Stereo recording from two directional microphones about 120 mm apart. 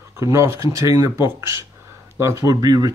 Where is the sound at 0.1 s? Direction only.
25° right (ahead or behind).